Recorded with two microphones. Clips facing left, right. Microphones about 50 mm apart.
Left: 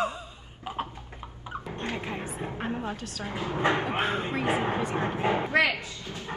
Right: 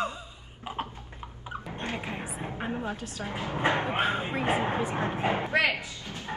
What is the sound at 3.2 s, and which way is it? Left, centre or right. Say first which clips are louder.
Speech: left 2 dB; right.